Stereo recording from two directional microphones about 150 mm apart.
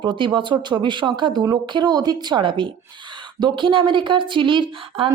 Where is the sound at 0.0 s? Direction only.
30° right (ahead or behind).